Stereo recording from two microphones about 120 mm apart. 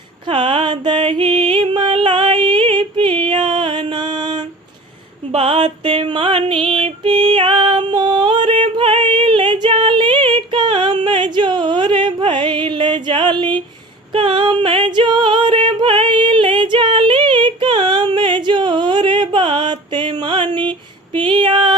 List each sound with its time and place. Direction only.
0.3 s music: 50° right (ahead or behind)
8.7 s female singing: 45° right (ahead or behind)
14.1 s a sound: 45° right (ahead or behind)
21.2 s female singing: 40° right (ahead or behind)